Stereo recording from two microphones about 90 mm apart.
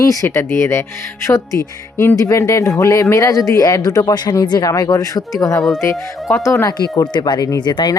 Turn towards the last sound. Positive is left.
turn(degrees=55)  # may be behind; listen again after turning